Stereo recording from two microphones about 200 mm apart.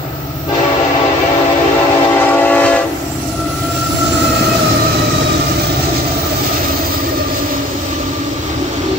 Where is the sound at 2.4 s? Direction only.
10° left (ahead or behind).